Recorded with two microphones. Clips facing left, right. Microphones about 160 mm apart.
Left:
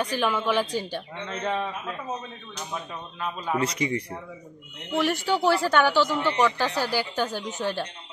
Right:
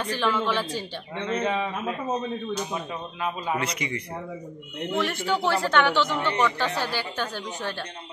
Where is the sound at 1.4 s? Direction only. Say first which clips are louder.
Left 1 dB; 5° right (ahead or behind).